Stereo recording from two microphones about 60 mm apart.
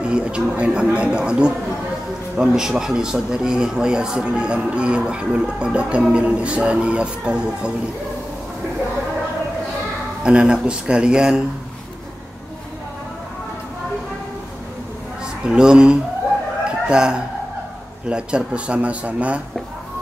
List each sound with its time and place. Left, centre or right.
0.0 s speech: centre
10.2 s speech: centre
15.4 s speech: centre